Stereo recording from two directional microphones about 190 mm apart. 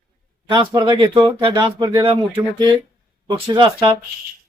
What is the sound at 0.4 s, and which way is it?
Speech, 25° right (ahead or behind).